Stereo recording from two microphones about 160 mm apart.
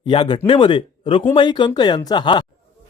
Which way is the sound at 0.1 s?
35° left (ahead or behind).